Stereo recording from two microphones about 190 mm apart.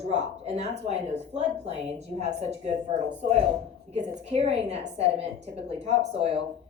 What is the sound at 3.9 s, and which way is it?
Speech, 35° right (ahead or behind).